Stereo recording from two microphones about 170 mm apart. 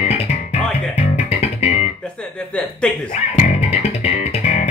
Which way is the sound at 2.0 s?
5° left (ahead or behind).